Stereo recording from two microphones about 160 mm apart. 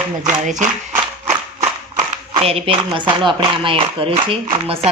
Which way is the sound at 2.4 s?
35° right (ahead or behind).